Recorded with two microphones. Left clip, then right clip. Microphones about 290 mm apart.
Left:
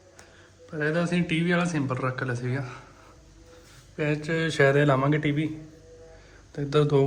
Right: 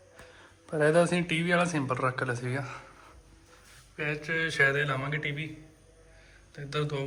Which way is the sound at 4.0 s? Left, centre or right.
Centre.